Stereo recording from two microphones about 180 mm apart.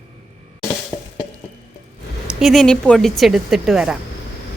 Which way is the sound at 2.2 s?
Centre (ahead or behind).